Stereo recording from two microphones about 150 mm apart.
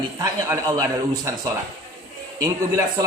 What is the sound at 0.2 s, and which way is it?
A man's voice, 25° right (ahead or behind).